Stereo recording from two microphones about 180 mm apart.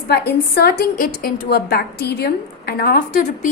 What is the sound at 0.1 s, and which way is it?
A woman's voice, 65° left (ahead or behind).